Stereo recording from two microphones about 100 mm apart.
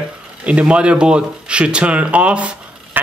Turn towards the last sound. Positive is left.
turn(degrees=-10)  # may be behind; listen again after turning